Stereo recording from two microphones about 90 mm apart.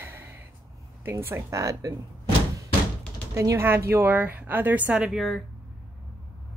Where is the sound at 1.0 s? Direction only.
30° right (ahead or behind).